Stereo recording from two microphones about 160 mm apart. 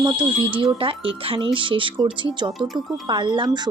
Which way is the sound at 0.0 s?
30° right (ahead or behind).